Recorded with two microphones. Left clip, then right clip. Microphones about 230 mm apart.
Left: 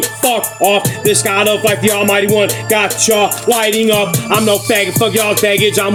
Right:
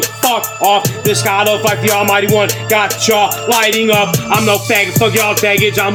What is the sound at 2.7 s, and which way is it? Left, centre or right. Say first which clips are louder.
Music: even; centre.